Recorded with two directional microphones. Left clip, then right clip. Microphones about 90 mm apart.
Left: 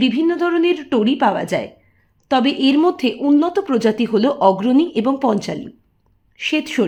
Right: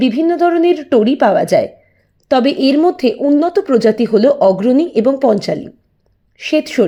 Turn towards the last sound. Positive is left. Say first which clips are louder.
# right 5 dB
turn(degrees=-25)  # may be behind; listen again after turning